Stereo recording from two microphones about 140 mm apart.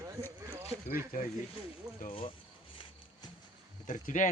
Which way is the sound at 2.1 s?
40° left (ahead or behind).